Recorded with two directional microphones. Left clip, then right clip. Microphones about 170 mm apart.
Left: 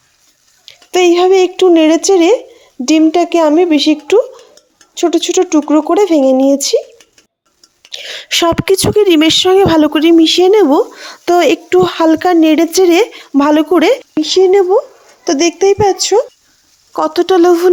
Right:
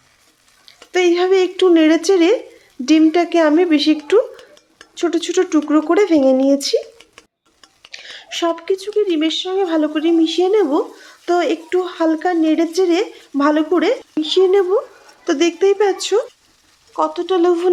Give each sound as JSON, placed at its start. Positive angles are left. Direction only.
{"t": 0.7, "sound": "a child's voice", "side_deg": 35}
{"t": 7.9, "sound": "a woman's voice", "side_deg": 45}
{"t": 14.2, "sound": "speech", "side_deg": 35}
{"t": 16.9, "sound": "speech", "side_deg": 45}